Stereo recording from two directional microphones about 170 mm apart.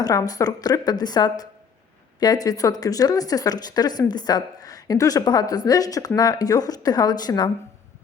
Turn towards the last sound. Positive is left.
turn(degrees=25)  # may be behind; listen again after turning